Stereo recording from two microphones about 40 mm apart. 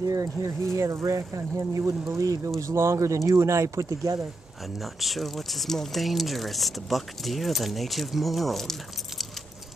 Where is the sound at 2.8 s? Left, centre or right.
Right.